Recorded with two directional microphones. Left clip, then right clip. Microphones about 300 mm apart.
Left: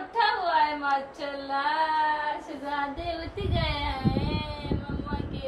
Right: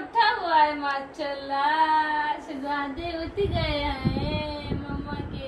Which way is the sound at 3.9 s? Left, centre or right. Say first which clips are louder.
Right 1 dB; centre.